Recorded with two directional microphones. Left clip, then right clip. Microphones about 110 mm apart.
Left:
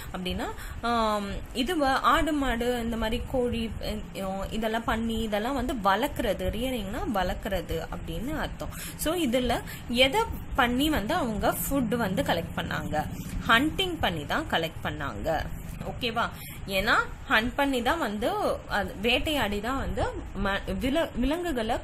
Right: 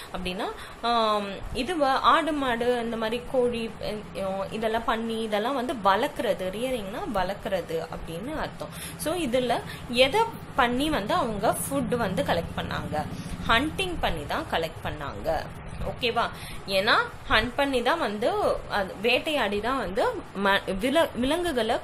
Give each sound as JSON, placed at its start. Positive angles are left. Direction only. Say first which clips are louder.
{"t": 0.1, "sound": "a woman's voice", "louder": "right 2 dB", "side_deg": 35}
{"t": 9.0, "sound": "a woman's voice", "louder": "right 1 dB", "side_deg": 50}
{"t": 16.0, "sound": "a woman's voice", "louder": "right 3 dB", "side_deg": 35}
{"t": 19.7, "sound": "speech", "louder": "right 5 dB", "side_deg": 15}